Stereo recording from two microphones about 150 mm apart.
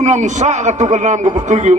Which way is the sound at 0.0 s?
50° right (ahead or behind).